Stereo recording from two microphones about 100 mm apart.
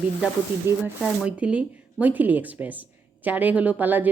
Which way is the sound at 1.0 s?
10° right (ahead or behind).